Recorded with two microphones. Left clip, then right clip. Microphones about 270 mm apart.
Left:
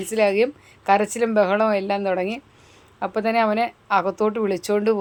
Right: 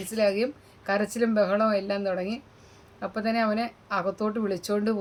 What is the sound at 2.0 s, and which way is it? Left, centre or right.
Speech, left.